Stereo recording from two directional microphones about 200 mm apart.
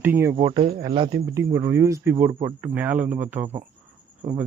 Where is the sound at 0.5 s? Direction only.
25° right (ahead or behind).